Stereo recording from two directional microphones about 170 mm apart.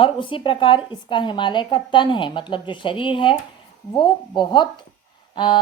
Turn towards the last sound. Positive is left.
turn(degrees=30)  # may be behind; listen again after turning